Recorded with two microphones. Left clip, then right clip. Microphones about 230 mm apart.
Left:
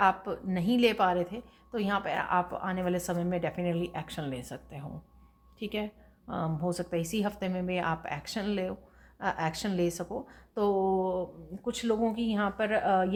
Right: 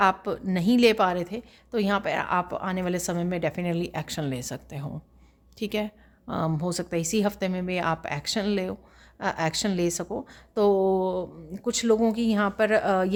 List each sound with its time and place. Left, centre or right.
0.0 s a woman's voice: right